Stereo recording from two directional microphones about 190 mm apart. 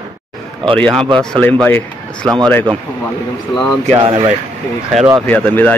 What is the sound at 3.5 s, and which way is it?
Speech, 25° left (ahead or behind).